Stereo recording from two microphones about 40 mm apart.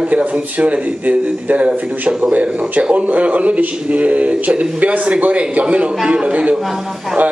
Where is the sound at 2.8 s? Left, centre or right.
Right.